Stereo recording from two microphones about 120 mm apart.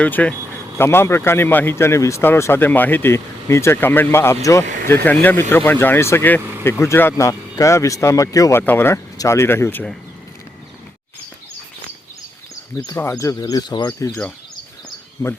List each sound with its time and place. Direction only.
0.0 s speech: 10° left (ahead or behind)
12.7 s speech: 30° left (ahead or behind)
15.2 s speech: 20° left (ahead or behind)